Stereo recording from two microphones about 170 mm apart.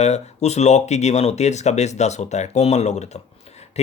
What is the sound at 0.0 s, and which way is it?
Speech, 40° left (ahead or behind).